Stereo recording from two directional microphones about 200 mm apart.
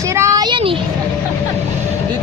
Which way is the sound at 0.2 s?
15° right (ahead or behind).